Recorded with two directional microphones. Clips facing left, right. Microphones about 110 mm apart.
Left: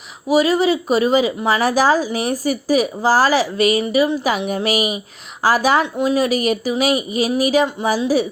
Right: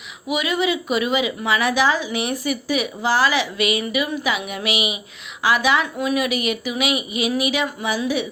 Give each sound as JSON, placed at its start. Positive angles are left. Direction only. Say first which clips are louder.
{"t": 0.3, "sound": "a woman's voice", "louder": "left 7 dB", "side_deg": 35}
{"t": 5.8, "sound": "a woman's voice", "louder": "left 4 dB", "side_deg": 25}